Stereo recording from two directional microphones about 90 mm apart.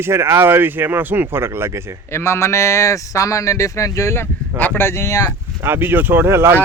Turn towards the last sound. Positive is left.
turn(degrees=-25)  # may be behind; listen again after turning